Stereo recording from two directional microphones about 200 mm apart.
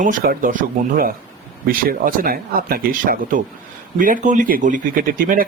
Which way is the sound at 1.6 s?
45° right (ahead or behind).